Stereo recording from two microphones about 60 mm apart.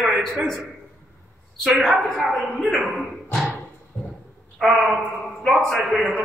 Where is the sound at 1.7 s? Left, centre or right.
Centre.